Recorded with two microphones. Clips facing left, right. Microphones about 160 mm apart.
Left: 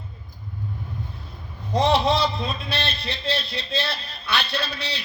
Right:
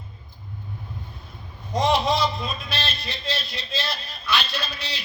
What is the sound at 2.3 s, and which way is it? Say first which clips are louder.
A man's voice: left 2 dB; 65° left (ahead or behind).